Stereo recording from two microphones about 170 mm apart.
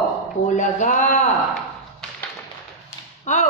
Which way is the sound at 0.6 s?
45° left (ahead or behind).